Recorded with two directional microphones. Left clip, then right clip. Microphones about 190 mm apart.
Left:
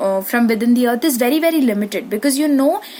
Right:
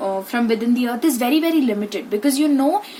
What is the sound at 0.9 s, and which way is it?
Speech, 45° left (ahead or behind).